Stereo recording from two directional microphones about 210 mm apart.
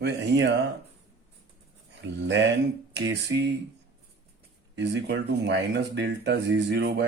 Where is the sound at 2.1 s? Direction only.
55° right (ahead or behind).